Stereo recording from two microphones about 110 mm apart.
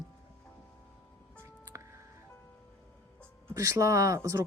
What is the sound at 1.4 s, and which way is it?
Music, 25° right (ahead or behind).